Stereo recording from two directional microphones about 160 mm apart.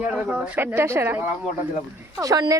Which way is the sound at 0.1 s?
10° right (ahead or behind).